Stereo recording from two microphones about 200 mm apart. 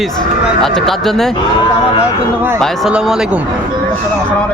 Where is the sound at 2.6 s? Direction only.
Centre (ahead or behind).